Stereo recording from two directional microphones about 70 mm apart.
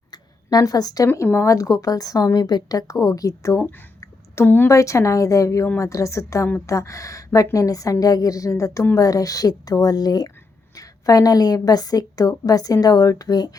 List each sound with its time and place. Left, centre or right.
0.1 s a sound: left
1.0 s a woman's voice: left
4.4 s a woman's voice: left
4.7 s a woman's voice: left